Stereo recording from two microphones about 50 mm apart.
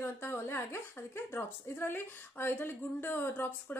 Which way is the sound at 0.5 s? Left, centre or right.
Left.